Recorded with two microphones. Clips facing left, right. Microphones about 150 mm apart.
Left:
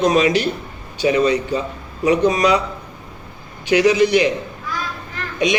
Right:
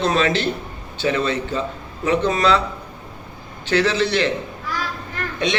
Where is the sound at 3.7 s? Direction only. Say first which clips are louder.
Left 5 dB; 15° left (ahead or behind).